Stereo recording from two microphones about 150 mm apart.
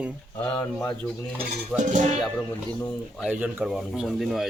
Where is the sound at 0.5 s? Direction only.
10° left (ahead or behind).